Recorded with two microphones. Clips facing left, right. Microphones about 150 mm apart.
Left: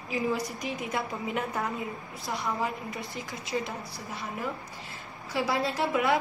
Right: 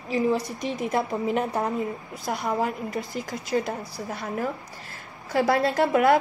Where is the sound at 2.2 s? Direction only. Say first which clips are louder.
Right 5 dB; 50° right (ahead or behind).